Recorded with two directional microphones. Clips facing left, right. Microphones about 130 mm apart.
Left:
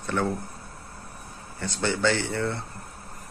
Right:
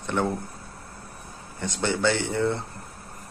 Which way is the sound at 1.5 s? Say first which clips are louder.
Right 1 dB; 15° right (ahead or behind).